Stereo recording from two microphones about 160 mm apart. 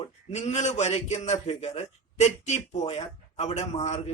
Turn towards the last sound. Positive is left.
turn(degrees=45)  # may be behind; listen again after turning